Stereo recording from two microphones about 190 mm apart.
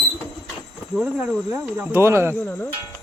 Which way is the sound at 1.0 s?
5° right (ahead or behind).